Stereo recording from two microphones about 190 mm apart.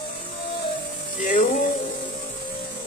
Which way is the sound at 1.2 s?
45° left (ahead or behind).